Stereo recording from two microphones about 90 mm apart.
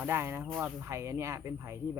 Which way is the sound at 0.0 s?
30° right (ahead or behind).